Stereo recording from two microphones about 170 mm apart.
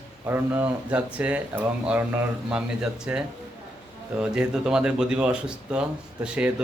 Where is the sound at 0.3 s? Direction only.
10° right (ahead or behind).